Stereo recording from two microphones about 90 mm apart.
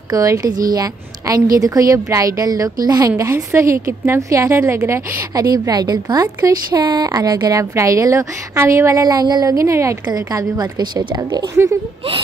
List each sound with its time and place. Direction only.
0.1 s a woman's voice: 40° right (ahead or behind)
5.3 s a woman's voice: 45° right (ahead or behind)
6.8 s speech: 55° right (ahead or behind)
7.1 s a woman's voice: 45° right (ahead or behind)
10.1 s a woman's voice: 45° right (ahead or behind)